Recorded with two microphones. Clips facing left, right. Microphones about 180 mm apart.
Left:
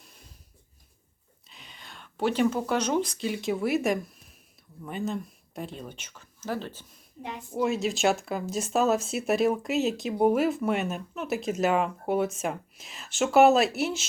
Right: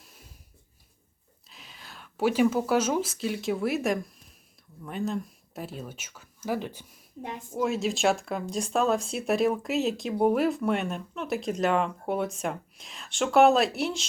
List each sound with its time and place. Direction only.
1.5 s speech: centre (ahead or behind)
7.2 s a woman's voice: 45° right (ahead or behind)
7.5 s speech: centre (ahead or behind)